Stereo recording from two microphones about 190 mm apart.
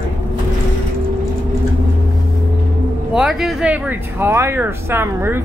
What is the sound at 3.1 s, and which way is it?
Speech, centre (ahead or behind).